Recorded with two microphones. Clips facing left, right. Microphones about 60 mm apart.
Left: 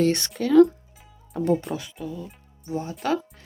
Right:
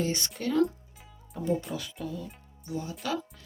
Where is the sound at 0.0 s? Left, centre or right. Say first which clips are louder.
Left 9 dB; left.